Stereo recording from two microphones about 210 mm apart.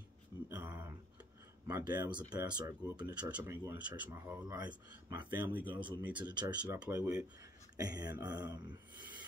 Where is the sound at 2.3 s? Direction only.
15° right (ahead or behind).